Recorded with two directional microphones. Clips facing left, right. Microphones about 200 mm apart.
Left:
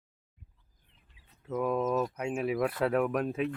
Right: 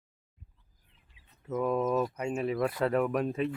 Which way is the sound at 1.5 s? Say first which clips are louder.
Right 1 dB; centre (ahead or behind).